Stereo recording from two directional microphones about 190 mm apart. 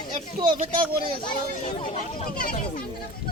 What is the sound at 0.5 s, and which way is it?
Speech, 40° right (ahead or behind).